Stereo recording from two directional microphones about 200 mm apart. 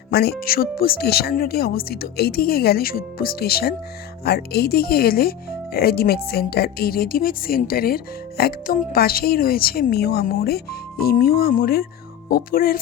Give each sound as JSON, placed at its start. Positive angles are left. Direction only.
{"t": 0.1, "sound": "speech", "side_deg": 55}